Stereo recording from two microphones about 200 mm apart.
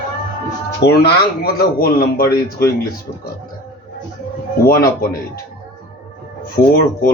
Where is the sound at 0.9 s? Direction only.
50° left (ahead or behind).